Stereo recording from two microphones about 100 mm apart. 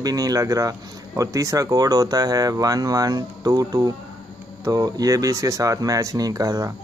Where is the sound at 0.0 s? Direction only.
35° right (ahead or behind).